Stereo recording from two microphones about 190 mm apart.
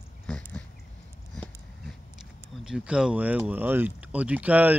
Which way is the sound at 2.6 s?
5° right (ahead or behind).